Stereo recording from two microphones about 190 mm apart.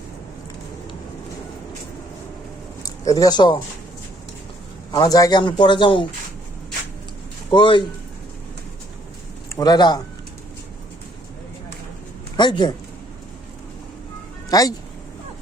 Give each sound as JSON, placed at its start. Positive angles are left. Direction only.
{"t": 2.8, "sound": "speech", "side_deg": 20}
{"t": 4.9, "sound": "a man's voice", "side_deg": 20}
{"t": 7.5, "sound": "a man's voice", "side_deg": 25}
{"t": 9.5, "sound": "a man's voice", "side_deg": 20}
{"t": 12.4, "sound": "a man's voice", "side_deg": 25}
{"t": 14.5, "sound": "a man's voice", "side_deg": 20}